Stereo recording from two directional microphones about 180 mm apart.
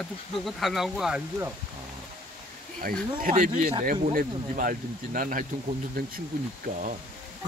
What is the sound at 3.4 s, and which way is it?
Speech, 45° right (ahead or behind).